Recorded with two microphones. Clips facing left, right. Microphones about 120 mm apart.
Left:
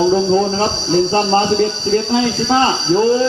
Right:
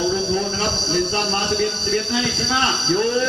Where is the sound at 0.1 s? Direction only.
40° left (ahead or behind).